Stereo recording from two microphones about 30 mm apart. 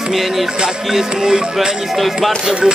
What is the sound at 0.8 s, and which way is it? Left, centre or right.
Speech, centre.